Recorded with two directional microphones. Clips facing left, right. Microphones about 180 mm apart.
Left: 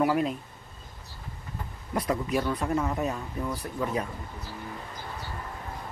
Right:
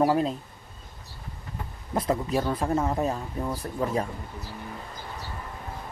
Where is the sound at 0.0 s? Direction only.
30° right (ahead or behind).